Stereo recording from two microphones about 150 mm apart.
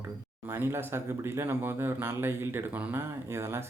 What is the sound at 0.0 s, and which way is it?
Speech, 15° right (ahead or behind).